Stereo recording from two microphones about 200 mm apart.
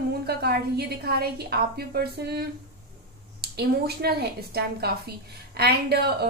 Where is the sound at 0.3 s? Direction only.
55° right (ahead or behind).